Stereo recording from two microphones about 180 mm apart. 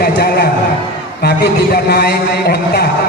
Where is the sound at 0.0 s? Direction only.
60° left (ahead or behind).